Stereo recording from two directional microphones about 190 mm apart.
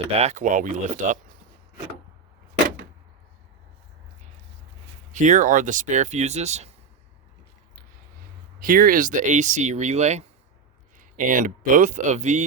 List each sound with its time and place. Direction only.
0.2 s speech: 40° right (ahead or behind)
5.1 s speech: 40° right (ahead or behind)
8.5 s speech: 50° right (ahead or behind)